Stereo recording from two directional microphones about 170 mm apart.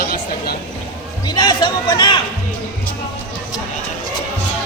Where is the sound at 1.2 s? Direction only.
25° left (ahead or behind).